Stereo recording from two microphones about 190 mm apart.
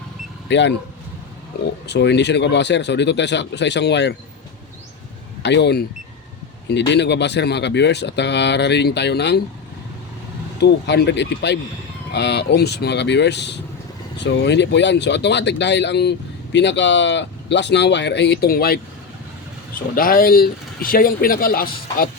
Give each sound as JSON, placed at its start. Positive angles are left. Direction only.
{"t": 0.4, "sound": "speech", "side_deg": 70}
{"t": 1.9, "sound": "a man's voice", "side_deg": 65}
{"t": 5.4, "sound": "a man's voice", "side_deg": 65}
{"t": 10.6, "sound": "a man's voice", "side_deg": 65}
{"t": 20.0, "sound": "speech", "side_deg": 50}